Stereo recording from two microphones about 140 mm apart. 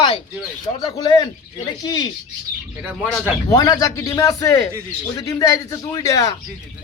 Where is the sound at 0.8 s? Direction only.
30° left (ahead or behind).